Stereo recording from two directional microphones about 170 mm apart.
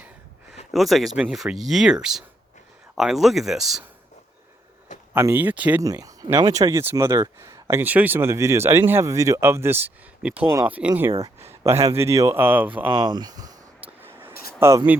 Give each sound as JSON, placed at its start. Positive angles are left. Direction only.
{"t": 0.7, "sound": "speech", "side_deg": 0}
{"t": 5.1, "sound": "speech", "side_deg": -10}
{"t": 5.8, "sound": "speech", "side_deg": -20}
{"t": 12.9, "sound": "speech", "side_deg": -25}
{"t": 13.8, "sound": "vehicle", "side_deg": -10}
{"t": 14.6, "sound": "speech", "side_deg": -15}